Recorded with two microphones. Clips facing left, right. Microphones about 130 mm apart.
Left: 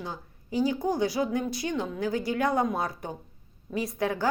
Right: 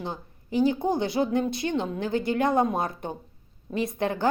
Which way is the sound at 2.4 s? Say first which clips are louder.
Right 2 dB; 20° right (ahead or behind).